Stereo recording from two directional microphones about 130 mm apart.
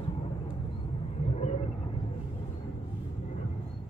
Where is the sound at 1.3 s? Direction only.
55° left (ahead or behind).